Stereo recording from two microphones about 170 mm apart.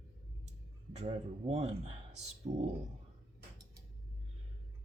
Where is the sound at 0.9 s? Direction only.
40° right (ahead or behind).